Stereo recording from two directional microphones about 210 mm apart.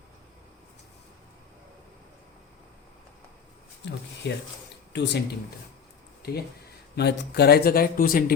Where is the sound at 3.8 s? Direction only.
60° left (ahead or behind).